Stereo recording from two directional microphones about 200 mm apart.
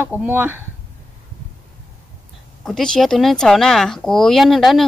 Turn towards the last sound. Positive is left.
turn(degrees=0)  # may be behind; listen again after turning